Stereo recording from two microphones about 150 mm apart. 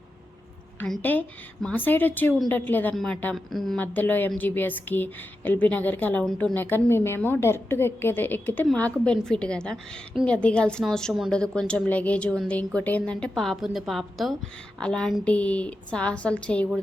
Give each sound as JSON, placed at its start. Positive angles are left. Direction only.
{"t": 0.8, "sound": "a woman's voice", "side_deg": 10}